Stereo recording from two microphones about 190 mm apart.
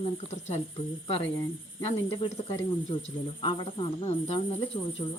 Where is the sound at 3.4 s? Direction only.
25° left (ahead or behind).